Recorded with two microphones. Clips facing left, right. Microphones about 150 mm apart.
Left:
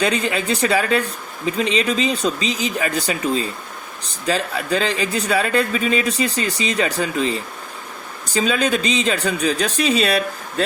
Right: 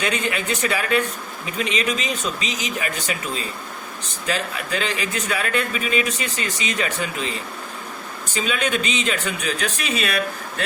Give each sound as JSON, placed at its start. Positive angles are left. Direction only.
{"t": 0.0, "sound": "speech", "side_deg": 35}